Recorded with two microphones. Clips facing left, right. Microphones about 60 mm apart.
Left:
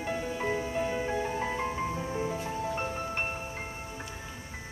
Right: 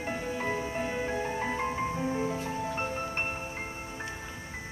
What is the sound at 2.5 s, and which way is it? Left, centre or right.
Music, centre.